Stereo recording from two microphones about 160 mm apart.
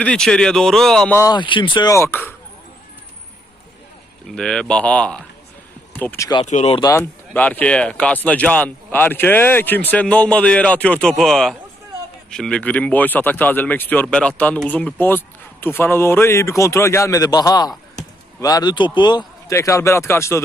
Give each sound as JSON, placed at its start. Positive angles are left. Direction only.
{"t": 0.0, "sound": "speech", "side_deg": 5}
{"t": 1.1, "sound": "a man's voice", "side_deg": 25}
{"t": 2.0, "sound": "speech", "side_deg": 15}
{"t": 4.4, "sound": "a man's voice", "side_deg": 5}
{"t": 6.4, "sound": "speech", "side_deg": 50}
{"t": 6.7, "sound": "a man's voice", "side_deg": 20}
{"t": 7.3, "sound": "a man's voice", "side_deg": 10}